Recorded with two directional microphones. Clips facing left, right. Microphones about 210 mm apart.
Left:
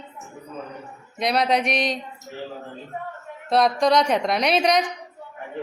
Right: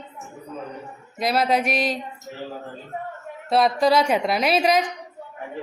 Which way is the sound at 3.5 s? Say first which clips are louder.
Even; 5° right (ahead or behind).